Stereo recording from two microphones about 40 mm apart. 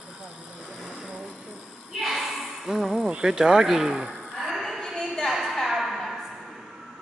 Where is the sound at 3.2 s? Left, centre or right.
Centre.